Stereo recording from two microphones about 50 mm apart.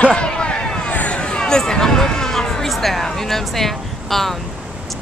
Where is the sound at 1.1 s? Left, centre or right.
Centre.